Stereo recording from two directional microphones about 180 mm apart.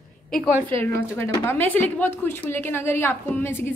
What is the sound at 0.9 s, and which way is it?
A woman's voice, 15° left (ahead or behind).